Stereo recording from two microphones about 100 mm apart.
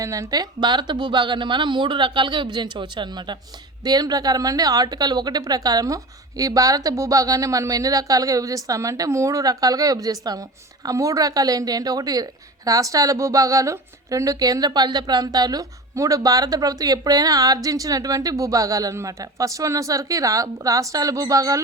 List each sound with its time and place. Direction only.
0.0 s a woman's voice: 35° right (ahead or behind)